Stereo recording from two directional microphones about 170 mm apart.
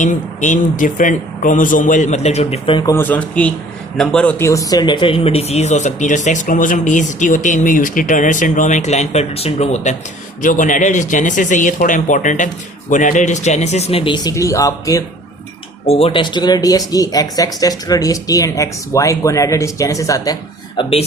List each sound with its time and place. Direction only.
0.0 s speech: 45° left (ahead or behind); by 2.9 s 30° left (ahead or behind)
2.9 s a man's voice: 10° left (ahead or behind)
15.9 s speech: 35° left (ahead or behind)